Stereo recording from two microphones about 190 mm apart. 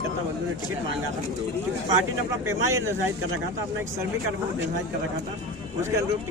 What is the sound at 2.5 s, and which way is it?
Speech, 15° right (ahead or behind).